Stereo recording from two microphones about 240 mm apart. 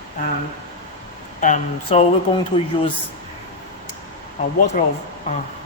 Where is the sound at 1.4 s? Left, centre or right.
Left.